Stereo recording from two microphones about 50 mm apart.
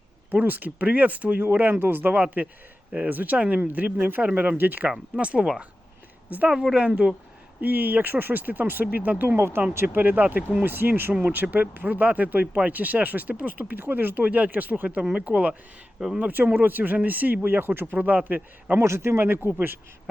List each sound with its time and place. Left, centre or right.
0.3 s speech: right
1.7 s speech: right
2.2 s speech: right
3.3 s speech: right
3.6 s speech: right
5.1 s speech: right
7.6 s speech: right
15.1 s speech: right
16.1 s speech: right
18.8 s speech: right